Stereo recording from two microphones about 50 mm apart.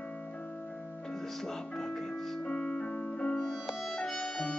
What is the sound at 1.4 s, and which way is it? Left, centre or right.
Music, centre.